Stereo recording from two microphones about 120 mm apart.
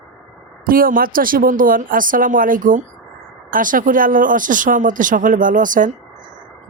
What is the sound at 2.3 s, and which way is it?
Speech, 90° right.